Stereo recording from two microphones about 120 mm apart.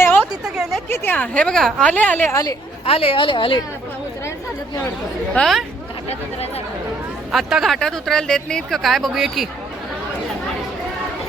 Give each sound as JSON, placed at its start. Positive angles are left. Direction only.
{"t": 0.2, "sound": "a sound", "side_deg": -5}
{"t": 0.9, "sound": "a woman's voice", "side_deg": 15}
{"t": 2.8, "sound": "a woman's voice", "side_deg": 50}
{"t": 5.3, "sound": "speech", "side_deg": 5}
{"t": 7.3, "sound": "speech", "side_deg": 0}